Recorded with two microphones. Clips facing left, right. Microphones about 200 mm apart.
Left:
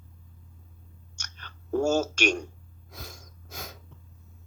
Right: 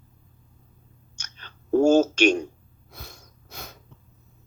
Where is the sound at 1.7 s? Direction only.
20° right (ahead or behind).